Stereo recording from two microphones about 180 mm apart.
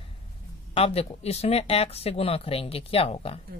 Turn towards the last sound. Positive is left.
turn(degrees=30)  # may be behind; listen again after turning